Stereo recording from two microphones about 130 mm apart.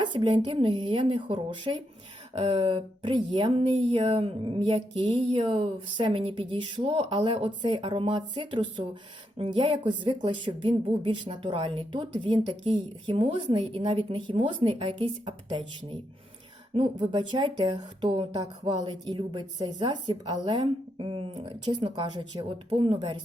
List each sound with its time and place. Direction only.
0.0 s a woman's voice: 40° right (ahead or behind)
3.8 s a sound: 50° right (ahead or behind)
5.4 s a woman's voice: 45° right (ahead or behind)
17.0 s a woman's voice: 35° right (ahead or behind)